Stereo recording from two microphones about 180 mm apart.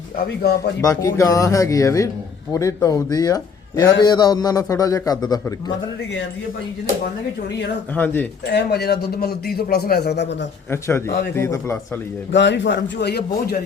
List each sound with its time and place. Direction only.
0.3 s a man's voice: 65° left (ahead or behind)
0.8 s a man's voice: 15° left (ahead or behind)
7.9 s speech: 10° left (ahead or behind)
8.4 s a man's voice: 65° left (ahead or behind)
10.7 s speech: 15° left (ahead or behind)
12.3 s a man's voice: 80° left; by 13.6 s 65° left (ahead or behind)